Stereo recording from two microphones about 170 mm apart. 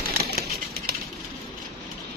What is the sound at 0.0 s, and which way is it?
Bird flight, 65° right (ahead or behind).